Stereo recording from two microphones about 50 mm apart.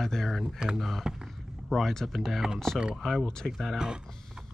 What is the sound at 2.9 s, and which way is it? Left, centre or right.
Speech, centre.